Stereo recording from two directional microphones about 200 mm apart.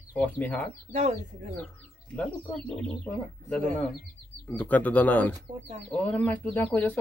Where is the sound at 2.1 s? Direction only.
5° left (ahead or behind).